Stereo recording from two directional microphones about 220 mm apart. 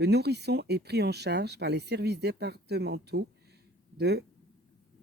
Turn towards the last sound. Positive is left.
turn(degrees=-50)  # may be behind; listen again after turning